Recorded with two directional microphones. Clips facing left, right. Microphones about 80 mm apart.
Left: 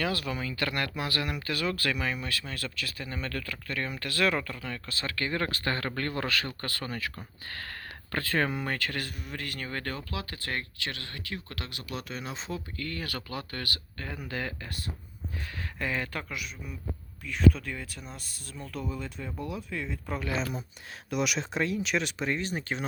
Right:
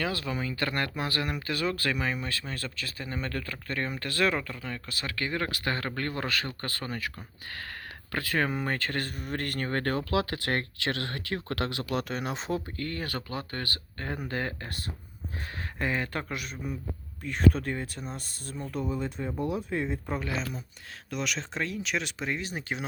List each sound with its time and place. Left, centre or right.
0.0 s speech: right
8.5 s speech: right
10.1 s speech: right
12.7 s speech: right
15.8 s speech: right
21.1 s speech: centre